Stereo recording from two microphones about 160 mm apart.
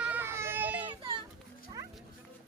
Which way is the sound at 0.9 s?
30° right (ahead or behind).